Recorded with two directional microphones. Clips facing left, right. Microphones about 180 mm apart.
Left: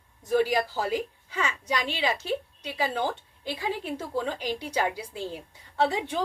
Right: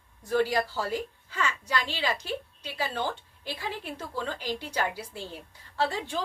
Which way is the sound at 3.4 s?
15° left (ahead or behind).